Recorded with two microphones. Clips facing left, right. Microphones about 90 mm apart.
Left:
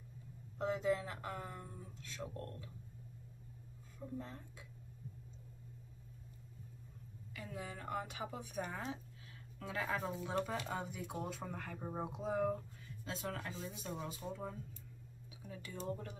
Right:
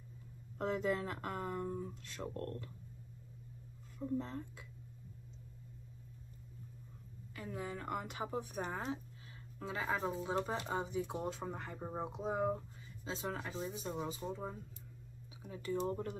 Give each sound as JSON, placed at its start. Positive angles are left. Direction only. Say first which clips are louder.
{"t": 0.6, "sound": "speech", "louder": "even", "side_deg": -55}
{"t": 4.2, "sound": "speech", "louder": "right 6 dB", "side_deg": -60}
{"t": 7.3, "sound": "a woman's voice", "louder": "right 4 dB", "side_deg": -40}
{"t": 8.3, "sound": "speech", "louder": "right 3 dB", "side_deg": -30}